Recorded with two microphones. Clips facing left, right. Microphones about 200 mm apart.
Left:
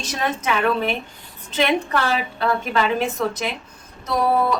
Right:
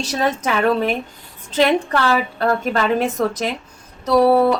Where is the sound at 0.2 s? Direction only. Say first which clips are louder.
Right 3 dB; 40° right (ahead or behind).